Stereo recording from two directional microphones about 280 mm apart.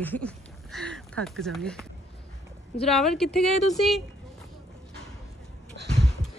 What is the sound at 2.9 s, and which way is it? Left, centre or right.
A woman's voice, centre.